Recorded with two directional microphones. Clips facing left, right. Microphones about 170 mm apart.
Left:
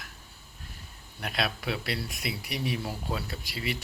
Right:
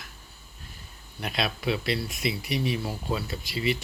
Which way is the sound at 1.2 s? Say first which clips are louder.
Right 3 dB; 5° left (ahead or behind).